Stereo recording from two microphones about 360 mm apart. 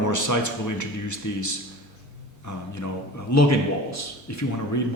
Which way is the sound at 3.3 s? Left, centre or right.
Left.